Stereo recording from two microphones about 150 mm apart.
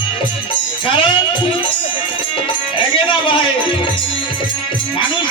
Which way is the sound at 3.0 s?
35° left (ahead or behind).